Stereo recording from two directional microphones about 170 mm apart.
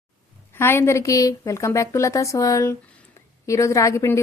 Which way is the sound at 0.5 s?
15° left (ahead or behind).